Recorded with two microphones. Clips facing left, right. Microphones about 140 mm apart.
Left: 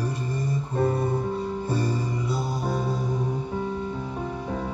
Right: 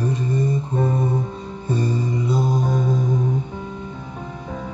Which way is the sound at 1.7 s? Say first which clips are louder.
Right 8 dB; 20° right (ahead or behind).